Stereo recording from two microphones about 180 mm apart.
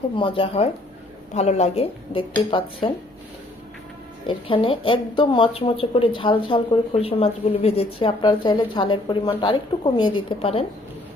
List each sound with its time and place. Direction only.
0.2 s a woman's voice: 30° left (ahead or behind)
4.3 s a woman's voice: 30° left (ahead or behind)